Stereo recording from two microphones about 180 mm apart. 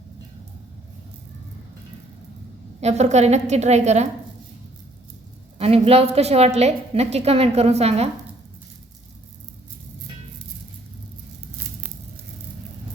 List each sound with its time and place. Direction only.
2.8 s a woman's voice: 40° right (ahead or behind)
5.5 s a woman's voice: 35° right (ahead or behind)